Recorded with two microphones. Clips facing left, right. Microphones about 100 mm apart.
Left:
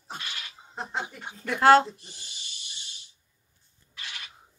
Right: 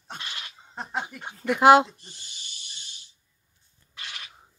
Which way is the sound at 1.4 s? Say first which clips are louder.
Right 2 dB; 15° right (ahead or behind).